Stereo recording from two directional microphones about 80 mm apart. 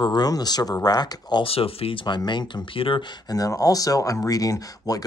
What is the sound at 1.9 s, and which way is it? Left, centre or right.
Speech, left.